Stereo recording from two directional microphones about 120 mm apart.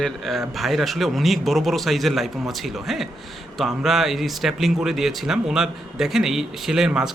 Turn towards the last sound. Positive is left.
turn(degrees=-5)  # may be behind; listen again after turning